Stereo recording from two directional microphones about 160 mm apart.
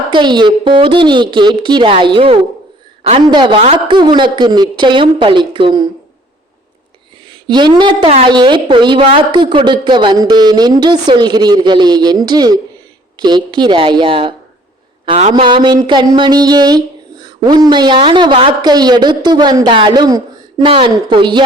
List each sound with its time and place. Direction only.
0.1 s a woman's voice: 30° right (ahead or behind)
3.2 s speech: 30° right (ahead or behind)
7.3 s a woman's voice: 30° right (ahead or behind)